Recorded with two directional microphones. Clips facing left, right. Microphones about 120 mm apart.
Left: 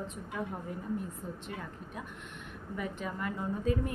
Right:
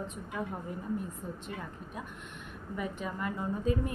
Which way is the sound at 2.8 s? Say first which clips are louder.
Right 1 dB; 20° right (ahead or behind).